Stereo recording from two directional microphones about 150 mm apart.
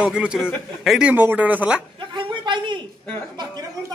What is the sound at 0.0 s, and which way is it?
Speech, 5° right (ahead or behind).